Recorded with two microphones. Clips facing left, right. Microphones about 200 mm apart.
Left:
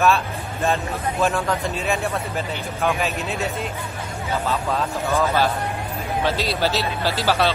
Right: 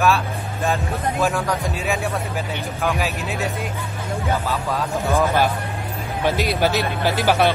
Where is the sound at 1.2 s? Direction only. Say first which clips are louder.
Left 1 dB; centre (ahead or behind).